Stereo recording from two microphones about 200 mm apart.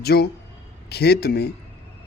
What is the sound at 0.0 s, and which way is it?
A man's voice, 50° left (ahead or behind).